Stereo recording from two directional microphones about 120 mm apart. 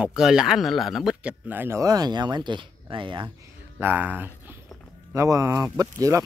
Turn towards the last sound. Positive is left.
turn(degrees=-30)  # may be behind; listen again after turning